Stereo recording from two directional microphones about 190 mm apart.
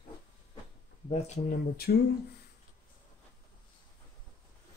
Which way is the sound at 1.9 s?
50° left (ahead or behind).